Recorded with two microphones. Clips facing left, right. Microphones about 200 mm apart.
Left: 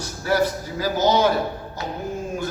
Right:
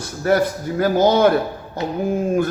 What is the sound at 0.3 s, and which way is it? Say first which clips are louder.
A man's voice: right 4 dB; 55° right (ahead or behind).